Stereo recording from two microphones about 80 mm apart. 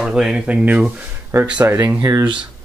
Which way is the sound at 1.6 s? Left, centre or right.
Right.